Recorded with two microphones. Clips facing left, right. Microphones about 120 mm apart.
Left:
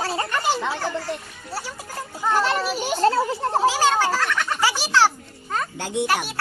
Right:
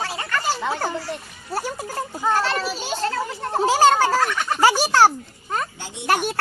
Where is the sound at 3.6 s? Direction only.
45° right (ahead or behind).